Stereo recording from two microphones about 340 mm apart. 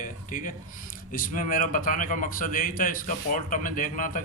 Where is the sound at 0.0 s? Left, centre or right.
Left.